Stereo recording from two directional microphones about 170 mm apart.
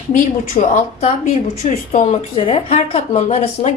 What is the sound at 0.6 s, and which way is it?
A woman's voice, 45° left (ahead or behind).